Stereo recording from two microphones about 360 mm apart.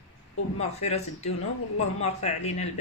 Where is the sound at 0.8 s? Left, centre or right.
Centre.